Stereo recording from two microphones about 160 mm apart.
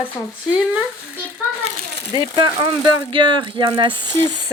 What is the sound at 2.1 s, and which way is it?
Speech, 30° right (ahead or behind).